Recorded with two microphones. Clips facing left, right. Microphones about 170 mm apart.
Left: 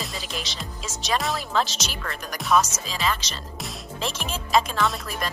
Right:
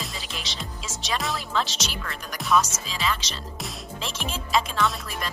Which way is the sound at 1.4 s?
45° left (ahead or behind).